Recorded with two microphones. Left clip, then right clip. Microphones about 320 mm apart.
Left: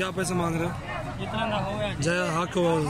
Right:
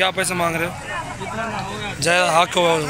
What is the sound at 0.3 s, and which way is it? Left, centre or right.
Speech, centre.